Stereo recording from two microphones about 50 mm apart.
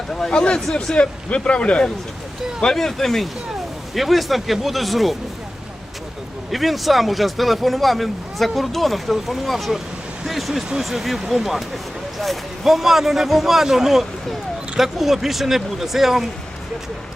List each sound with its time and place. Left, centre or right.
0.1 s speech: centre
2.6 s speech: centre
6.5 s speech: centre